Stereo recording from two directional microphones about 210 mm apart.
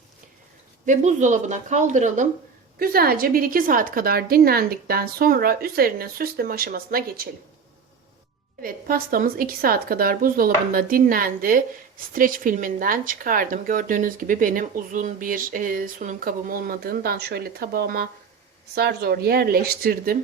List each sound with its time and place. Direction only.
0.9 s a woman's voice: 35° right (ahead or behind)
8.6 s a woman's voice: 45° right (ahead or behind)